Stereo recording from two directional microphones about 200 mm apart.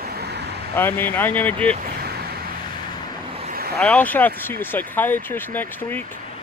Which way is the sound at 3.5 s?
50° right (ahead or behind).